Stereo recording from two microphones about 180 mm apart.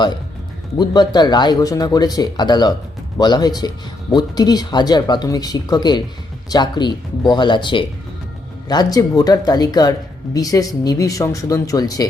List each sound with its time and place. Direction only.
0.8 s speech: 20° left (ahead or behind)